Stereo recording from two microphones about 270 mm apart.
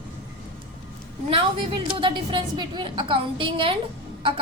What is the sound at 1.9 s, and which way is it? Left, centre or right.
A woman's voice, centre.